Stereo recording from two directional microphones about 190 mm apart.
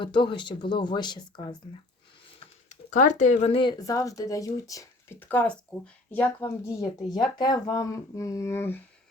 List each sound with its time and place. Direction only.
0.0 s speech: 25° left (ahead or behind)
2.6 s speech: 40° left (ahead or behind); by 6.5 s 10° left (ahead or behind)
7.1 s speech: 20° left (ahead or behind)